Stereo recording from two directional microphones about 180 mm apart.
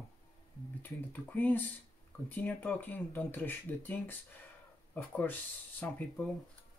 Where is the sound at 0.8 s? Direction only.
10° left (ahead or behind).